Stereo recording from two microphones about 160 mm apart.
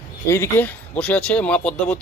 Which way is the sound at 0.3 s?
15° left (ahead or behind).